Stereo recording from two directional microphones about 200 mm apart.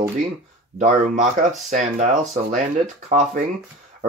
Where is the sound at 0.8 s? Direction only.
40° right (ahead or behind).